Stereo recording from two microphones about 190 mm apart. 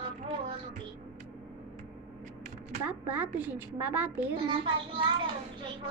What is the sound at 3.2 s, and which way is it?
Speech, 10° right (ahead or behind).